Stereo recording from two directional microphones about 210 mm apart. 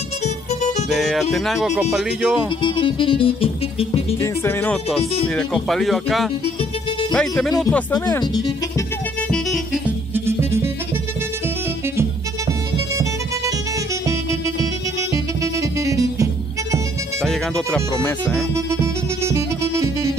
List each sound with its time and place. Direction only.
0.9 s speech: centre (ahead or behind)
2.6 s music: 25° left (ahead or behind)
4.2 s speech: 10° left (ahead or behind)
7.9 s speech: 20° left (ahead or behind)
9.3 s music: centre (ahead or behind)
10.1 s music: 10° right (ahead or behind)
15.4 s music: 15° right (ahead or behind)
17.2 s speech: 5° left (ahead or behind)
18.5 s music: 15° right (ahead or behind)